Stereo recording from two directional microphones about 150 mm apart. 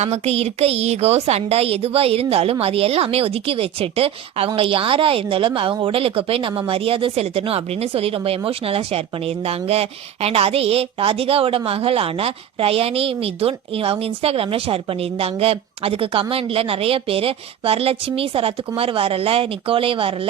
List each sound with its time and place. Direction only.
0.0 s a woman's voice: 45° right (ahead or behind)